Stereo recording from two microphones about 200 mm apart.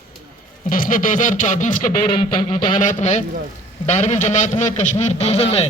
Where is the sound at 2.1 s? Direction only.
25° left (ahead or behind).